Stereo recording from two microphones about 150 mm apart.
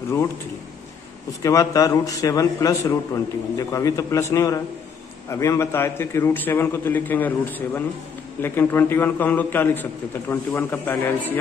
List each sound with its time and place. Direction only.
1.4 s a man's voice: 20° left (ahead or behind)